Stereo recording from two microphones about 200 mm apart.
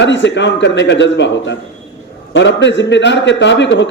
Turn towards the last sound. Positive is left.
turn(degrees=65)  # may be behind; listen again after turning